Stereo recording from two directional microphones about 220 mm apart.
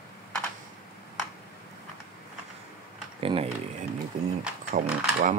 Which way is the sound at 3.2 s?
25° right (ahead or behind).